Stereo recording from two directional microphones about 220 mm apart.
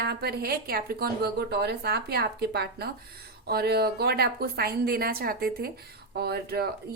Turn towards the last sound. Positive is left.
turn(degrees=-45)  # may be behind; listen again after turning